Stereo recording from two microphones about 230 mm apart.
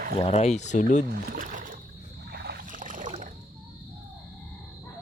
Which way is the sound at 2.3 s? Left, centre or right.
Right.